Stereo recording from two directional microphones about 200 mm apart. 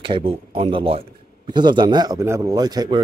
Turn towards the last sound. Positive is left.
turn(degrees=-20)  # may be behind; listen again after turning